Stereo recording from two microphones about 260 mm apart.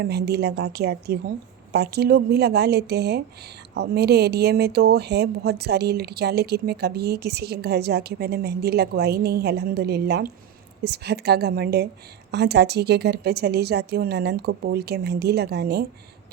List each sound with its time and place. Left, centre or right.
0.0 s speech: right